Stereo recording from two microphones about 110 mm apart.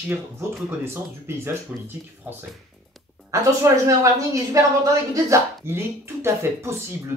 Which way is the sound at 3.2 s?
30° right (ahead or behind).